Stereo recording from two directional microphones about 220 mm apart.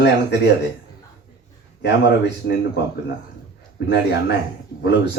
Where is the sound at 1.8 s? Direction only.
50° left (ahead or behind).